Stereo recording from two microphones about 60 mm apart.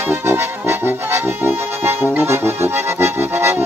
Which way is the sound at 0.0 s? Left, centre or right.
Right.